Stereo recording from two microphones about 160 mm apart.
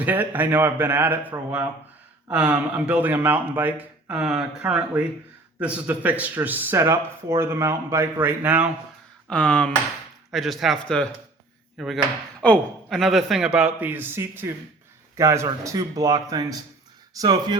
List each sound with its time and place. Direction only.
0.0 s speech: 10° right (ahead or behind)
9.3 s a man's voice: 5° left (ahead or behind); by 17.6 s 25° right (ahead or behind)